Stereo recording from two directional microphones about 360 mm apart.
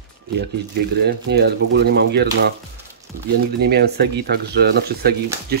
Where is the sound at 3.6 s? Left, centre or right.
Right.